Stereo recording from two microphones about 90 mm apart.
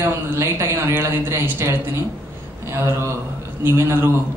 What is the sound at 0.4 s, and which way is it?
Speech, 30° right (ahead or behind).